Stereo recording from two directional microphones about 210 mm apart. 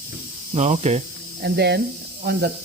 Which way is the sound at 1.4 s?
50° right (ahead or behind).